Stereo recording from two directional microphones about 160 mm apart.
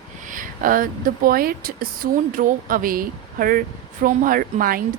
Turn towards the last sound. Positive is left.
turn(degrees=-60)  # may be behind; listen again after turning